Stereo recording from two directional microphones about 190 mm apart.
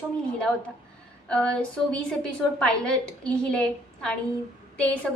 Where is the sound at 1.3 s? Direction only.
5° left (ahead or behind).